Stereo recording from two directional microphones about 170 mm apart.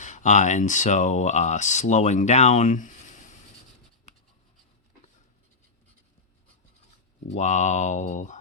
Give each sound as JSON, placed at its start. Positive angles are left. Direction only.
{"t": 0.0, "sound": "speech", "side_deg": 45}
{"t": 7.3, "sound": "speech", "side_deg": 40}